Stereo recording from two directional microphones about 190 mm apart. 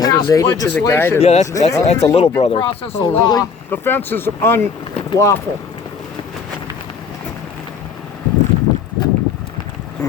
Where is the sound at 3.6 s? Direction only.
10° left (ahead or behind).